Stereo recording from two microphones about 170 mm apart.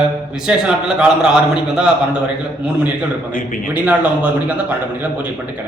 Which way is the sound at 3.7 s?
10° right (ahead or behind).